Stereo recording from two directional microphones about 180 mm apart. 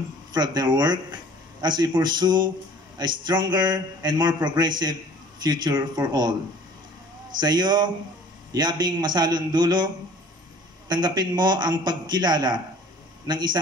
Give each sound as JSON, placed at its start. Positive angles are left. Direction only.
{"t": 0.3, "sound": "a man's voice", "side_deg": -25}
{"t": 10.9, "sound": "a man's voice", "side_deg": -25}